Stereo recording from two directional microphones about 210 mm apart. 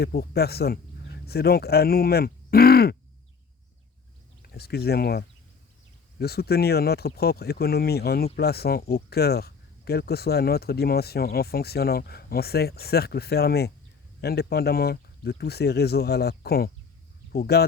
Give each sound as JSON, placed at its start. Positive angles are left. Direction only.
{"t": 0.0, "sound": "speech", "side_deg": 50}
{"t": 4.4, "sound": "speech", "side_deg": 50}